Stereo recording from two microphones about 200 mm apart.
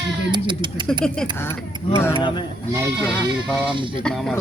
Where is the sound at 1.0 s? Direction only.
5° left (ahead or behind).